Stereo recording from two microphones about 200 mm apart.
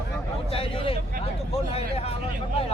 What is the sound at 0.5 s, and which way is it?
Speech, 25° left (ahead or behind).